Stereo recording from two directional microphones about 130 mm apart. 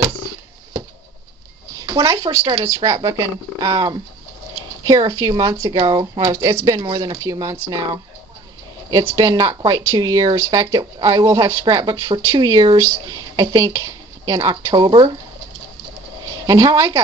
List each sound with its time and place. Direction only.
1.9 s speech: 25° right (ahead or behind)
5.8 s speech: 40° right (ahead or behind)
6.1 s speech: 30° right (ahead or behind)
9.1 s speech: 30° right (ahead or behind)
16.4 s speech: 30° right (ahead or behind)